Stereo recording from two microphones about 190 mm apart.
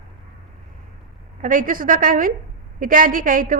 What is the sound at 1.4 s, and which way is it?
A woman's voice, 45° right (ahead or behind).